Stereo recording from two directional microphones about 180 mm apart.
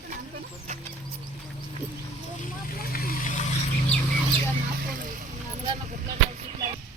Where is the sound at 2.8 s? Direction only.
55° left (ahead or behind).